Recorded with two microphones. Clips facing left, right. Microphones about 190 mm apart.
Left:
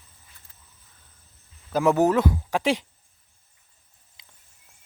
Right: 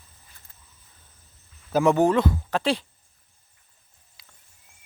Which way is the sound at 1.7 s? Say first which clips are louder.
Right 1 dB; 5° left (ahead or behind).